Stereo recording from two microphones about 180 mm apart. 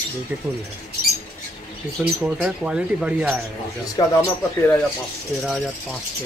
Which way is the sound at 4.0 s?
25° left (ahead or behind).